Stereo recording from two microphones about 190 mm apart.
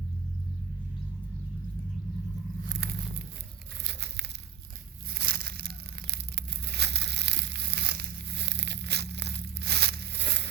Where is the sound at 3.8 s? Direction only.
65° right (ahead or behind).